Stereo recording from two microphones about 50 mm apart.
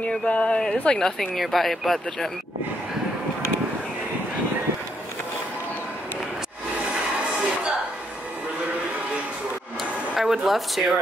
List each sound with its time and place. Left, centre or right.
0.0 s speech: centre
10.1 s speech: centre